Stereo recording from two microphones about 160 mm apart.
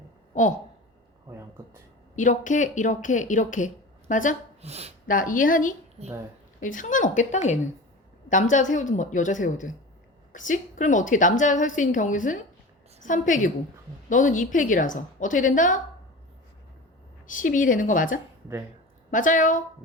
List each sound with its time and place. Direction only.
0.3 s speech: 50° left (ahead or behind)
2.1 s a woman's voice: 50° left (ahead or behind)
4.6 s speech: 40° right (ahead or behind)
5.0 s a woman's voice: 60° left (ahead or behind)
6.0 s speech: 40° right (ahead or behind)
6.6 s a woman's voice: 55° left (ahead or behind)
17.2 s a woman's voice: 55° left (ahead or behind)